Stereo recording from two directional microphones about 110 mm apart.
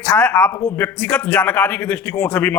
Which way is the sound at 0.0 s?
10° left (ahead or behind).